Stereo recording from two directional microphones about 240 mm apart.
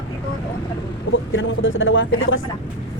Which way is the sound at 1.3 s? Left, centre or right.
Left.